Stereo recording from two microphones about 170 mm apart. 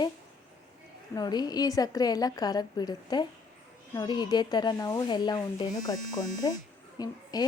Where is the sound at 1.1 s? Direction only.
25° left (ahead or behind).